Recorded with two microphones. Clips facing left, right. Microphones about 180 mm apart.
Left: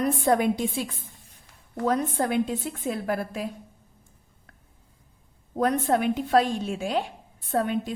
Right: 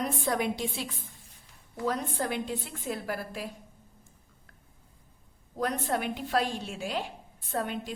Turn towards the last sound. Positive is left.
turn(degrees=50)  # may be behind; listen again after turning